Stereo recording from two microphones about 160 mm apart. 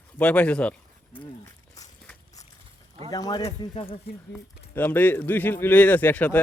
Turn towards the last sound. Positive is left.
turn(degrees=10)  # may be behind; listen again after turning